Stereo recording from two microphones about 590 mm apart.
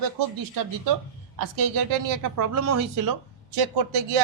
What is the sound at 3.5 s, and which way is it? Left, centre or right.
Speech, right.